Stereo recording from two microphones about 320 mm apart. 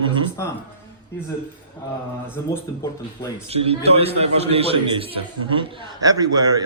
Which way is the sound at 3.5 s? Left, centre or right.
Centre.